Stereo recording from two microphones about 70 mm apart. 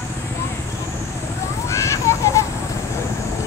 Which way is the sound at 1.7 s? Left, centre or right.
Left.